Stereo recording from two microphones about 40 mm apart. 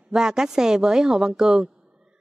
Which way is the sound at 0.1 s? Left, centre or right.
Centre.